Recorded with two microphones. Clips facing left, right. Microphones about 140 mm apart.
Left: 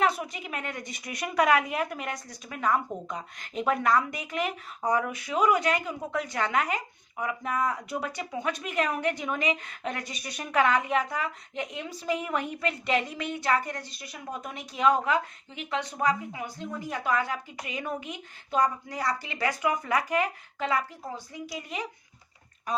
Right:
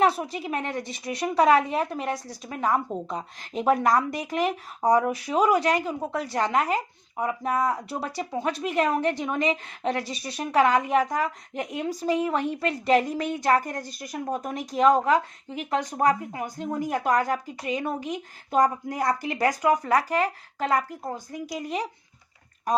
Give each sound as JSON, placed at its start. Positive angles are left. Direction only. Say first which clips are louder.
{"t": 0.0, "sound": "speech", "louder": "right 4 dB", "side_deg": -35}